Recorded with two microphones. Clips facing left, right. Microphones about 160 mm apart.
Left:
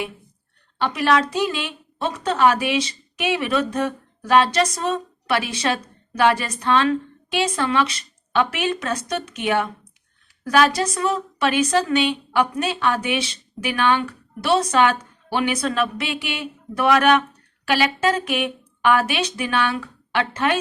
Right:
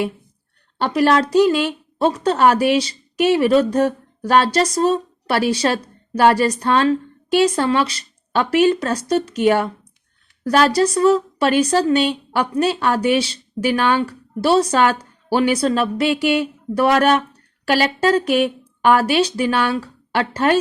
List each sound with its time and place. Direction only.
0.8 s a woman's voice: 40° right (ahead or behind)
10.7 s a woman's voice: 30° right (ahead or behind)